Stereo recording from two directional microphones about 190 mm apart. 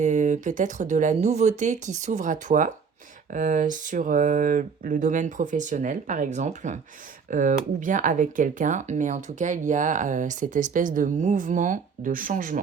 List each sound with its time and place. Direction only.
0.0 s speech: 40° right (ahead or behind)